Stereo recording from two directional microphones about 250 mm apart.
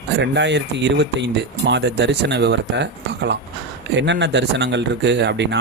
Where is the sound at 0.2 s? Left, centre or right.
Right.